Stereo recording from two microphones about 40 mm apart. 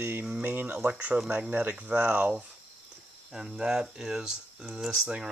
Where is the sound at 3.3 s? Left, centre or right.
Centre.